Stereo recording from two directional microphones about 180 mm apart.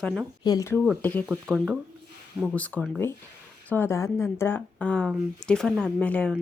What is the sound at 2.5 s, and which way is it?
Speech, 10° left (ahead or behind).